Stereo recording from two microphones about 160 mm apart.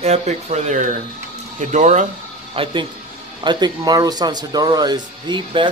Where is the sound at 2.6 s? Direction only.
35° right (ahead or behind).